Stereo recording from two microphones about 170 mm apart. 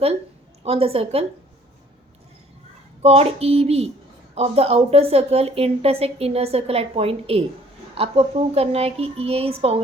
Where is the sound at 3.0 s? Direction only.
35° right (ahead or behind).